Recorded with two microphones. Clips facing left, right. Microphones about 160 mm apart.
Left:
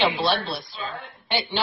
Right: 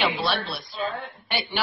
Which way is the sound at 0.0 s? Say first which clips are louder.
Left 3 dB; 30° left (ahead or behind).